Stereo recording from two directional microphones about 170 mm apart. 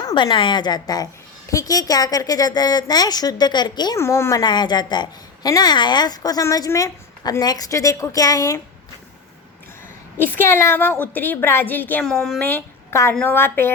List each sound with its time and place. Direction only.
0.0 s a woman's voice: 25° left (ahead or behind)
10.3 s a woman's voice: 15° left (ahead or behind)